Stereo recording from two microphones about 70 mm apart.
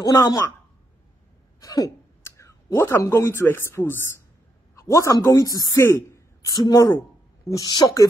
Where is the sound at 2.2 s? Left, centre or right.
Left.